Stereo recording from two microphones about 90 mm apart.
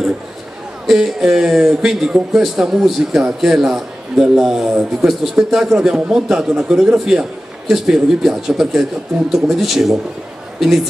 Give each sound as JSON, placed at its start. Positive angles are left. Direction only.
{"t": 0.8, "sound": "a man's voice", "side_deg": -5}